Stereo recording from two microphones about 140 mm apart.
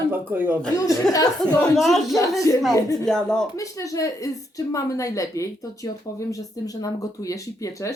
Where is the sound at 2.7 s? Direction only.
25° left (ahead or behind).